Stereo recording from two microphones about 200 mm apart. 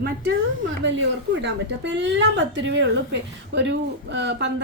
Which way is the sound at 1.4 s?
60° right (ahead or behind).